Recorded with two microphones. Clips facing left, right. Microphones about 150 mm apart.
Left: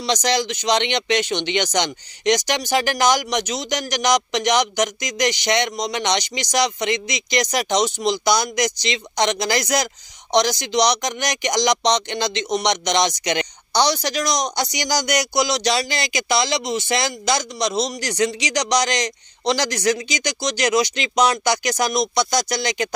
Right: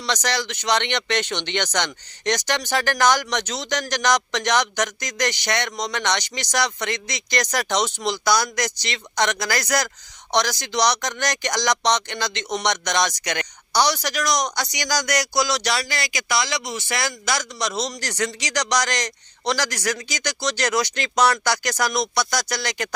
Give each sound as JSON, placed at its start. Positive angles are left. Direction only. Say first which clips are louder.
{"t": 0.0, "sound": "speech", "louder": "left 4 dB", "side_deg": 20}